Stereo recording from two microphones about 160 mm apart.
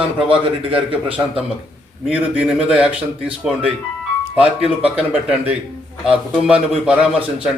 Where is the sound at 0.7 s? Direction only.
5° right (ahead or behind).